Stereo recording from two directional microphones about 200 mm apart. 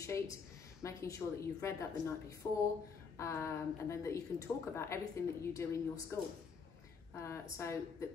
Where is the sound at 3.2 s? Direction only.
15° left (ahead or behind).